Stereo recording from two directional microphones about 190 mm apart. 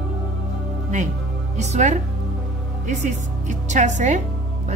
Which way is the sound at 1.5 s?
40° right (ahead or behind).